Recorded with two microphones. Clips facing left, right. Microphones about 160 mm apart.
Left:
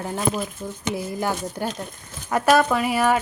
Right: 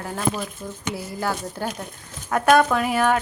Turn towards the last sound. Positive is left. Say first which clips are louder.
# even
turn(degrees=5)  # may be behind; listen again after turning